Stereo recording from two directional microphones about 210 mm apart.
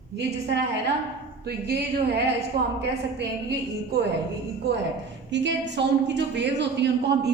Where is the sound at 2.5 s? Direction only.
45° right (ahead or behind).